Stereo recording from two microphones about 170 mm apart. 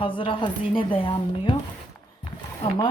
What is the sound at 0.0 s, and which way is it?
Speech, 30° left (ahead or behind).